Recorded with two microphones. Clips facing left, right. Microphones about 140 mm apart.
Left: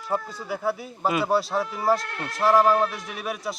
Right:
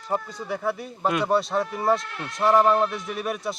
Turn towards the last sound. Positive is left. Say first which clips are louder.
# right 2 dB
turn(degrees=0)  # may be behind; listen again after turning